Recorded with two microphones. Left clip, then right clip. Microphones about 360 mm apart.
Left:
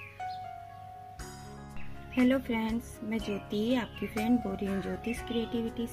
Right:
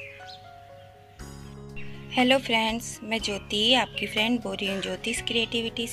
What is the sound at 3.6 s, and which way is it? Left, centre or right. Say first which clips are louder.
Speech: right 12 dB; centre.